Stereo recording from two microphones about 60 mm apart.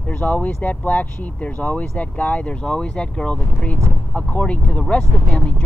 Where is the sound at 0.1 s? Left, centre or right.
Left.